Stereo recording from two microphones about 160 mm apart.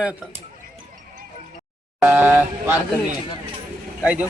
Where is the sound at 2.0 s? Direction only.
10° right (ahead or behind).